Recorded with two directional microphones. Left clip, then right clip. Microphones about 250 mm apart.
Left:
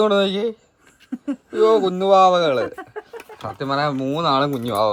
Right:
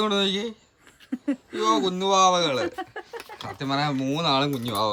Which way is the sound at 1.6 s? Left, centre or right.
Centre.